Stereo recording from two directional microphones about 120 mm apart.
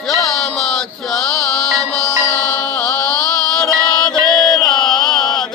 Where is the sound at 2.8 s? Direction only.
10° left (ahead or behind).